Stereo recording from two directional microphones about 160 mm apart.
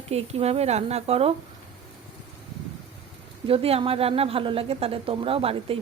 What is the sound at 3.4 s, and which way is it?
Speech, 35° right (ahead or behind).